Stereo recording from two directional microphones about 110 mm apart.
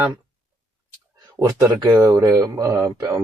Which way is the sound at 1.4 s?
35° right (ahead or behind).